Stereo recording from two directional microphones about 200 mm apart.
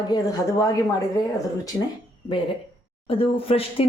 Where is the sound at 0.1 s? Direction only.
20° left (ahead or behind).